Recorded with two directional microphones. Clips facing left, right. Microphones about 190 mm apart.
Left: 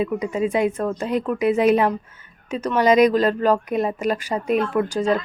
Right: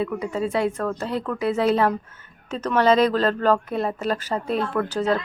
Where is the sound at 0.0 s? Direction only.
15° left (ahead or behind).